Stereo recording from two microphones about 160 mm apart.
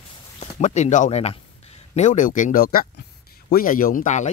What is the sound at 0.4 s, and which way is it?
A man's voice, 45° left (ahead or behind).